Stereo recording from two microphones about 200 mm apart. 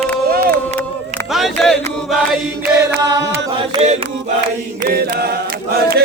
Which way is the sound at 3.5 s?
30° right (ahead or behind).